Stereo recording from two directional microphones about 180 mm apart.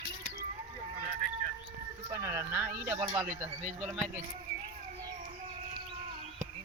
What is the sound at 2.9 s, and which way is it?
Speech, 15° right (ahead or behind).